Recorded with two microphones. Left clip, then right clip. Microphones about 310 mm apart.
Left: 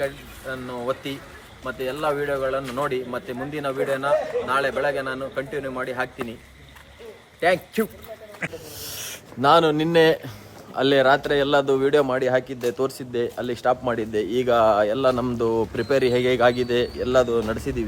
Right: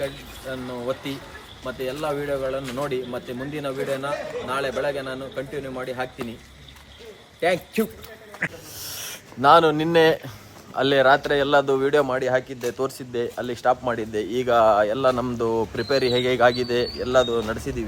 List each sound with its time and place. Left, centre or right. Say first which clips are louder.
0.0 s a man's voice: left 2 dB; centre
7.4 s a man's voice: left 1 dB; centre